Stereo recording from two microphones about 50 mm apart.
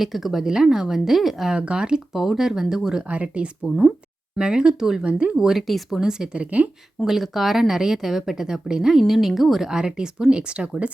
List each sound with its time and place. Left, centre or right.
0.0 s speech: centre
1.5 s speech: right
2.2 s speech: centre
3.1 s speech: right
5.0 s speech: right
5.4 s speech: centre
5.6 s speech: centre
6.0 s speech: centre
6.4 s speech: right
7.0 s speech: centre